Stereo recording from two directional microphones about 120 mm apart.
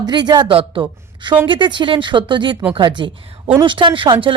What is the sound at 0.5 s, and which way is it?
A woman's voice, 50° right (ahead or behind).